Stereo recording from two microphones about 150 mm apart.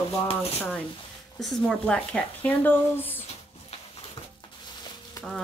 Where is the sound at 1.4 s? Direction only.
Centre (ahead or behind).